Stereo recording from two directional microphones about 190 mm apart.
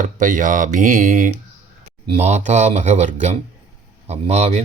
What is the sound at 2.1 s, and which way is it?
Speech, 35° right (ahead or behind).